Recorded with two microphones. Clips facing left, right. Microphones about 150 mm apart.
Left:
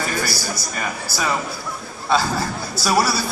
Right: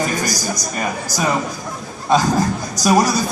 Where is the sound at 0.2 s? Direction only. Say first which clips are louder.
Right 3 dB; 15° right (ahead or behind).